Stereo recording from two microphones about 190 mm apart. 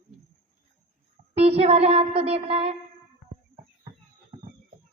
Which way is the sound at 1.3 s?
30° right (ahead or behind).